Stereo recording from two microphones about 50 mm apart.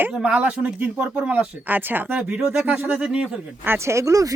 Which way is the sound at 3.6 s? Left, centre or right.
Right.